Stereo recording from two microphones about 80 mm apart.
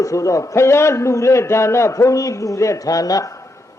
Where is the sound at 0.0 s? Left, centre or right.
Left.